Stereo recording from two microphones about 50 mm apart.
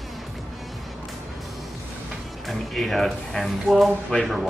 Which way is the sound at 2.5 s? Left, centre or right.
Centre.